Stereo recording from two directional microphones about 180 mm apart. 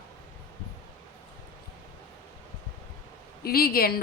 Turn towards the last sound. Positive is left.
turn(degrees=55)  # may be behind; listen again after turning